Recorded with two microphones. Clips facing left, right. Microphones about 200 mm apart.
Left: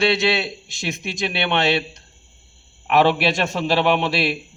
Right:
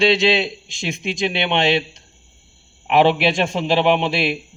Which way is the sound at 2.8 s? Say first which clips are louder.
Right 2 dB; 15° right (ahead or behind).